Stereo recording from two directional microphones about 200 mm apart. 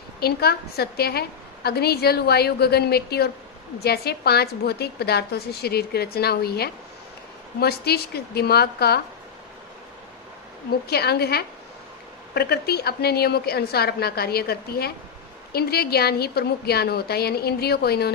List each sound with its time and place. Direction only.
0.2 s a woman's voice: 50° left (ahead or behind)
10.8 s a woman's voice: 55° left (ahead or behind)